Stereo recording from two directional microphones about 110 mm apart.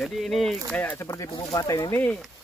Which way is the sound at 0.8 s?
20° left (ahead or behind).